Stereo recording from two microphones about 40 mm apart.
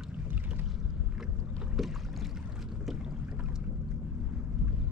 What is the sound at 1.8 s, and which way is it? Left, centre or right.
Rowboat, centre.